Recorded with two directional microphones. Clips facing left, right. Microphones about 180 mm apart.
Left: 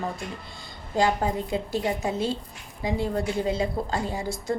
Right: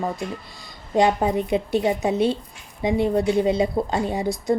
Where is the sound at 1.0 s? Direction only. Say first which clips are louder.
Right 5 dB; 20° right (ahead or behind).